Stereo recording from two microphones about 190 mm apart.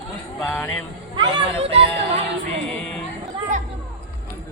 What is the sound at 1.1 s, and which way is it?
Speech, 25° right (ahead or behind).